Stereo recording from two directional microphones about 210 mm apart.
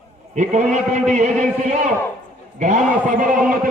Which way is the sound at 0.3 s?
35° right (ahead or behind).